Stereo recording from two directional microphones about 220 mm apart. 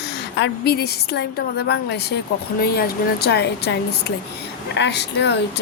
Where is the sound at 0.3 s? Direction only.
50° left (ahead or behind).